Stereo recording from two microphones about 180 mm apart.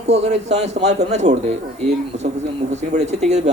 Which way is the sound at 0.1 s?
40° right (ahead or behind).